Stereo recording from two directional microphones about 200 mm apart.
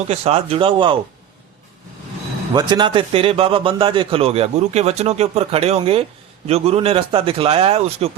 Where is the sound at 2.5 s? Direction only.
20° right (ahead or behind).